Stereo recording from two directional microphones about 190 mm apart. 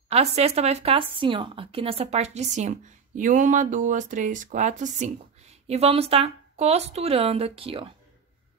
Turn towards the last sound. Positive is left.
turn(degrees=-30)  # may be behind; listen again after turning